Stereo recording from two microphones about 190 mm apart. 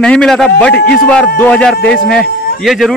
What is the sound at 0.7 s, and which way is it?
Speech, 55° left (ahead or behind).